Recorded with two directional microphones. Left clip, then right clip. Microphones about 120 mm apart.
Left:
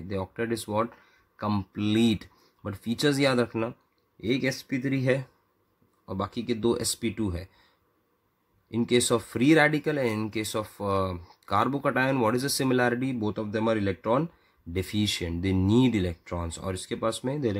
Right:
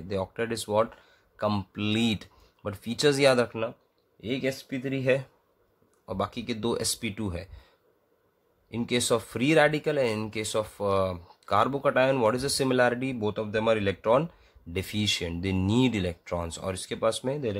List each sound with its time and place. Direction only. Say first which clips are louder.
0.1 s speech: right 1 dB; 25° left (ahead or behind)
4.3 s speech: left 2 dB; 50° left (ahead or behind)
6.0 s speech: even; 25° left (ahead or behind)